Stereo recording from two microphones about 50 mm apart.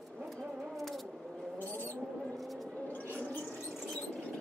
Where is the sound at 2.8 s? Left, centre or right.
Left.